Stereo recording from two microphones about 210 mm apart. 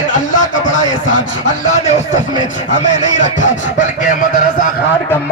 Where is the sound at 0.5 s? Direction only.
65° left (ahead or behind).